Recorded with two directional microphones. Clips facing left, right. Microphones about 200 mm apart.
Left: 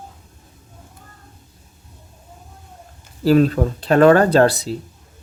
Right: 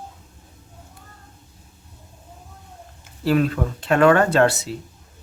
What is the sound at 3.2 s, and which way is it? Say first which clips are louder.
Speech: left 5 dB; 35° left (ahead or behind).